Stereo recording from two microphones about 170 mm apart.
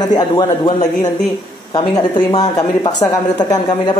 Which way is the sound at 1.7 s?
25° left (ahead or behind).